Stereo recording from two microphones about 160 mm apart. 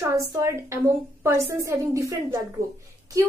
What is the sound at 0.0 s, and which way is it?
A woman's voice, 20° right (ahead or behind).